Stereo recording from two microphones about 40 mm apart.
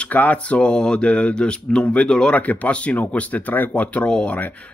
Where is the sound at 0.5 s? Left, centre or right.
Centre.